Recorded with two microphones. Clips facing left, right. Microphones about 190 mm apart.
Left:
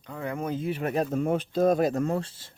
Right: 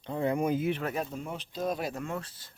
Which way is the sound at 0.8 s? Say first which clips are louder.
Left 7 dB; 40° left (ahead or behind).